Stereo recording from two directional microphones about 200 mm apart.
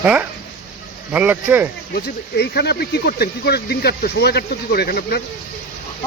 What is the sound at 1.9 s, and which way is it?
Speech, 55° left (ahead or behind).